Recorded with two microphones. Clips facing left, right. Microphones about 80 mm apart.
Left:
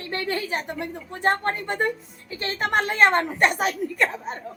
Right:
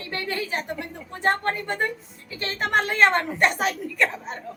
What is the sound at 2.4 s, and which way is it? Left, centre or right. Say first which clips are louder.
A woman's voice: even; left.